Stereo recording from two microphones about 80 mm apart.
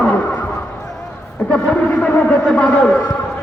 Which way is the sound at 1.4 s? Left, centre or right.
Centre.